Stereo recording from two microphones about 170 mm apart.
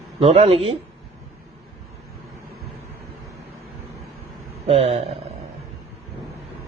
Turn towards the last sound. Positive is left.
turn(degrees=-35)  # may be behind; listen again after turning